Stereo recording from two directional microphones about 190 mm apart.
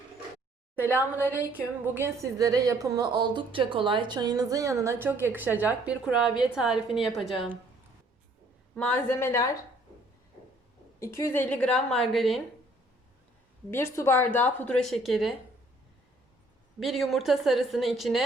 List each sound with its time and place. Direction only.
0.8 s a woman's voice: 10° right (ahead or behind)
8.7 s a woman's voice: 5° left (ahead or behind)
11.0 s a woman's voice: 15° left (ahead or behind)
13.7 s a woman's voice: 15° left (ahead or behind)
16.8 s a woman's voice: centre (ahead or behind)